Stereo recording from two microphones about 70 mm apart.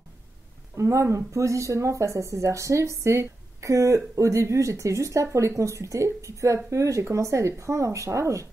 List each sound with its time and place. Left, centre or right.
0.7 s speech: right